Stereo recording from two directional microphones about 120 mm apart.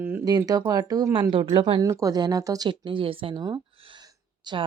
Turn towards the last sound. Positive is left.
turn(degrees=-35)  # may be behind; listen again after turning